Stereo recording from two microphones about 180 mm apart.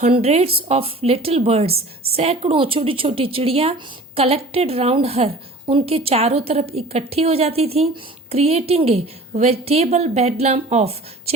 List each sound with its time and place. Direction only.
0.0 s a woman's voice: 35° right (ahead or behind)